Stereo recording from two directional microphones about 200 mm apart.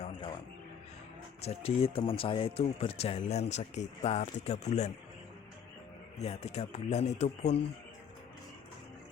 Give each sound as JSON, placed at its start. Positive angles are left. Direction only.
{"t": 1.5, "sound": "speech", "side_deg": 30}
{"t": 6.2, "sound": "speech", "side_deg": 30}